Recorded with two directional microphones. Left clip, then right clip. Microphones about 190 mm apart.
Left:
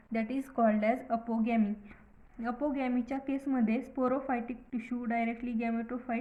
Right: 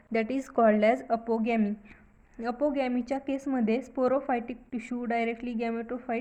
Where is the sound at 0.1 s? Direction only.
50° right (ahead or behind).